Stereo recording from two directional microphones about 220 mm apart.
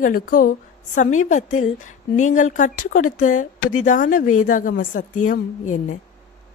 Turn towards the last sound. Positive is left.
turn(degrees=35)  # may be behind; listen again after turning